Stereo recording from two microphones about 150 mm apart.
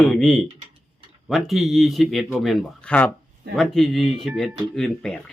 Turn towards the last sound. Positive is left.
turn(degrees=5)  # may be behind; listen again after turning